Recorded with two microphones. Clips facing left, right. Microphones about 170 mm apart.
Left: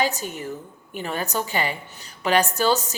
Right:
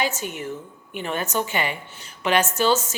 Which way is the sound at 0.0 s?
40° left (ahead or behind).